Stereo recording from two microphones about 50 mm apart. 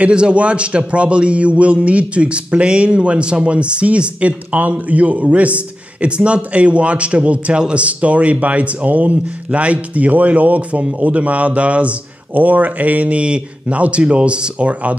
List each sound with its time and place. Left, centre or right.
0.0 s a man's voice: right